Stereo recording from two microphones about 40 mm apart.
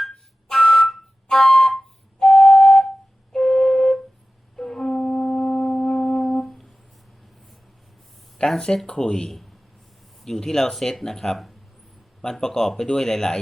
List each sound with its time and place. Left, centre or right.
0.5 s whistle: centre
3.3 s flute: centre
4.5 s wind instrument: centre
8.4 s speech: centre
12.4 s speech: centre